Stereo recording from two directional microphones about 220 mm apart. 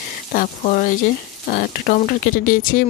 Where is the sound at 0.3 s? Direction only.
40° left (ahead or behind).